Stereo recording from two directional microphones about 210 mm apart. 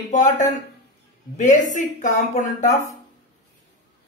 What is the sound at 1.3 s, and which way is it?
Speech, 35° left (ahead or behind).